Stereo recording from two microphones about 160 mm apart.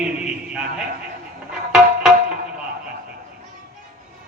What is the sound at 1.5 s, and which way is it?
Music, 5° right (ahead or behind).